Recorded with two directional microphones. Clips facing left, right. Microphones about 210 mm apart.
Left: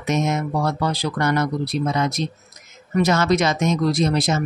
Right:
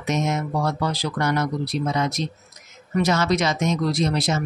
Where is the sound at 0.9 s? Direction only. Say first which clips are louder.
Left 2 dB; 55° left (ahead or behind).